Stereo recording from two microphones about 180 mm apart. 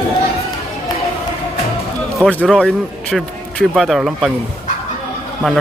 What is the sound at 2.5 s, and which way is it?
Speech, centre (ahead or behind).